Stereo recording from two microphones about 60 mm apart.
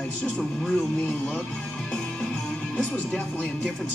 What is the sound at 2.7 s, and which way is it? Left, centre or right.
Speech, centre.